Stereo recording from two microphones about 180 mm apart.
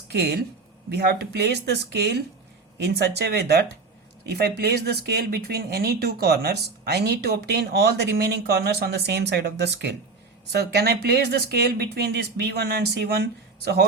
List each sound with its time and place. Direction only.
0.1 s speech: 65° right (ahead or behind)